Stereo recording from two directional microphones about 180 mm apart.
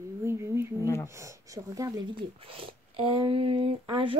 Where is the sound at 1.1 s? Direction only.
15° right (ahead or behind).